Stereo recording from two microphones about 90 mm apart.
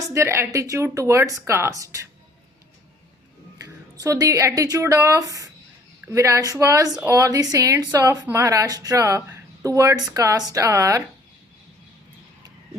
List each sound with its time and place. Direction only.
0.1 s speech: 30° right (ahead or behind)
3.6 s a woman's voice: 40° right (ahead or behind)